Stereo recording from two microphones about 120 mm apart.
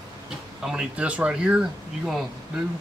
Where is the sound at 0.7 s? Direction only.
10° right (ahead or behind).